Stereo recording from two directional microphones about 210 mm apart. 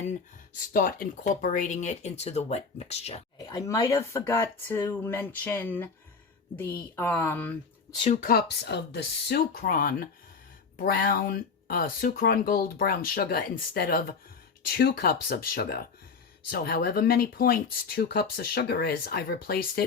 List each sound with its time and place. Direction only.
0.7 s speech: 40° left (ahead or behind)
3.3 s speech: 20° left (ahead or behind)
8.0 s speech: 40° left (ahead or behind)